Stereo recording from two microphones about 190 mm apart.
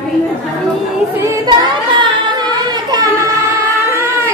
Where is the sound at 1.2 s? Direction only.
15° right (ahead or behind).